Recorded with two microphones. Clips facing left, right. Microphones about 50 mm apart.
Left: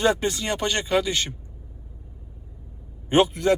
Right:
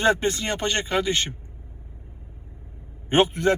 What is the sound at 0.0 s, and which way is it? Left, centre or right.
Speech, right.